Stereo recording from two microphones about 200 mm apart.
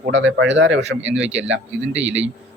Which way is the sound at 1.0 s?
5° right (ahead or behind).